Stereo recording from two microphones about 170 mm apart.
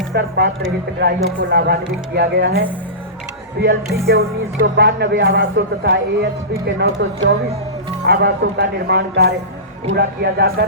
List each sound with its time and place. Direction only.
0.1 s speech: 70° right (ahead or behind)